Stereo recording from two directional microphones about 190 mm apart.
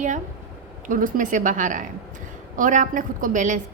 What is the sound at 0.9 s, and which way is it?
A woman's voice, 45° right (ahead or behind).